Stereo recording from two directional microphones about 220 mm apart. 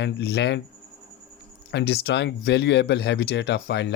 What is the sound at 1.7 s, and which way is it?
Speech, 50° left (ahead or behind).